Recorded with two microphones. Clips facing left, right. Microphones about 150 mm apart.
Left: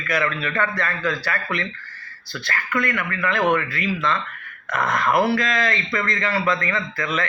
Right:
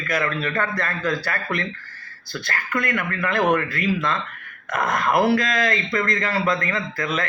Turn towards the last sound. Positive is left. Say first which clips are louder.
# even
turn(degrees=-45)  # may be behind; listen again after turning